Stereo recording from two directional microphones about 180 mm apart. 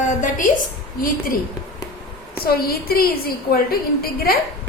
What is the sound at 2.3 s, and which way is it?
A woman's voice, 60° left (ahead or behind).